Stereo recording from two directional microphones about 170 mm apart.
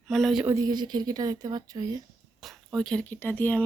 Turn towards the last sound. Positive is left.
turn(degrees=10)  # may be behind; listen again after turning